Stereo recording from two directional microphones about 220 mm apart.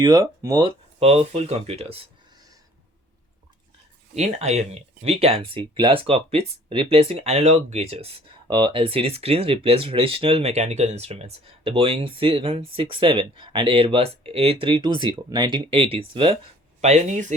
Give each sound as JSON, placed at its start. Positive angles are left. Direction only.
{"t": 0.0, "sound": "speech", "side_deg": -20}
{"t": 4.1, "sound": "speech", "side_deg": -30}